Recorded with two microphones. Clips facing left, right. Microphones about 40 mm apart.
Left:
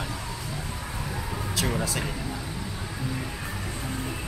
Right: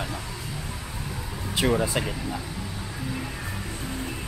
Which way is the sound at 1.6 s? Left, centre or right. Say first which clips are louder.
Right 7 dB; centre.